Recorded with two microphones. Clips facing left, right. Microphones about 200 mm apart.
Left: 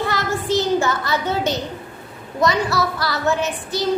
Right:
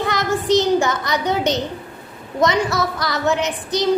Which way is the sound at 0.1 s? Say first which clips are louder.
Right 3 dB; 20° right (ahead or behind).